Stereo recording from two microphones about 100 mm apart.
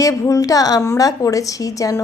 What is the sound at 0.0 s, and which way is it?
A woman's voice, 35° left (ahead or behind).